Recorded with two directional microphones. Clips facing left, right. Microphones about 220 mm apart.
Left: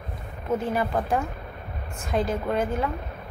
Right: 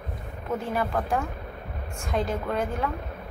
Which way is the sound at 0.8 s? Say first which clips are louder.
Left 2 dB; 15° left (ahead or behind).